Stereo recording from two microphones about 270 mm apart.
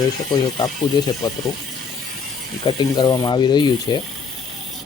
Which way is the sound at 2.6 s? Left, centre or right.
Centre.